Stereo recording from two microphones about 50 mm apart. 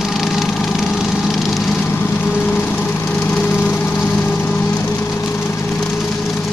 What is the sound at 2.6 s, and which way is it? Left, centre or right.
Lawn mower, left.